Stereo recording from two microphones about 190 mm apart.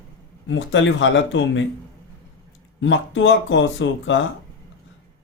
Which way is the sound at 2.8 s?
80° left.